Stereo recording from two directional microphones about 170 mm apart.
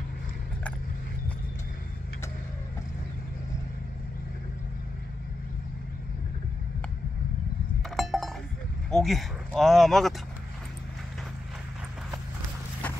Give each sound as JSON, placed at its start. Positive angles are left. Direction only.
{"t": 7.9, "sound": "chink", "side_deg": 0}
{"t": 8.9, "sound": "speech", "side_deg": 0}